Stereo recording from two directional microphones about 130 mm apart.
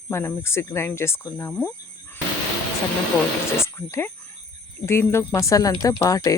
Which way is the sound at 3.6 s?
20° left (ahead or behind).